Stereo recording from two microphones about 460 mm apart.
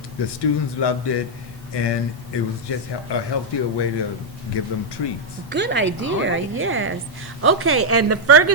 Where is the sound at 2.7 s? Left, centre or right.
Left.